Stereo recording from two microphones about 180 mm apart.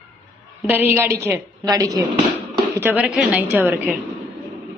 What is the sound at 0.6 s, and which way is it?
A woman's voice, 10° right (ahead or behind).